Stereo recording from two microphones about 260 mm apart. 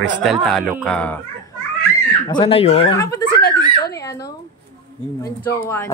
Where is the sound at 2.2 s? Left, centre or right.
Centre.